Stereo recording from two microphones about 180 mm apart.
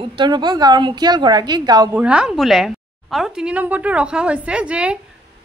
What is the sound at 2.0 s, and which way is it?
A woman's voice, 5° right (ahead or behind).